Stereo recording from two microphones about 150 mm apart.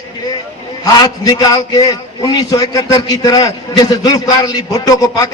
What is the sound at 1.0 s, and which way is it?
A man's voice, 25° left (ahead or behind).